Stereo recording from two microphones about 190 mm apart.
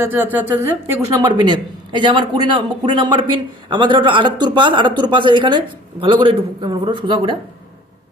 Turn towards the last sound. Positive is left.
turn(degrees=-25)  # may be behind; listen again after turning